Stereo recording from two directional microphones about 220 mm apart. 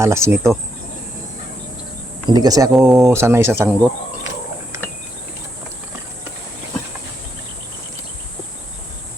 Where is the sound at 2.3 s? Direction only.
15° right (ahead or behind).